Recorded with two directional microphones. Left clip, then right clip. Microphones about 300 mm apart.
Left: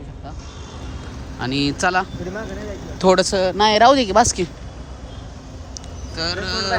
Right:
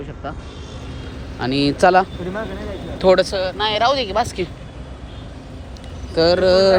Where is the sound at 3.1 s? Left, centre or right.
Left.